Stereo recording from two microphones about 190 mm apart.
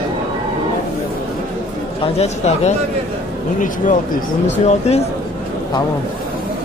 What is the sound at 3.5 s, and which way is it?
Speech, 45° left (ahead or behind).